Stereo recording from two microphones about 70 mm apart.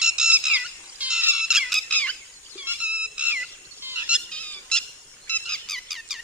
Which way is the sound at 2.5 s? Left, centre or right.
Right.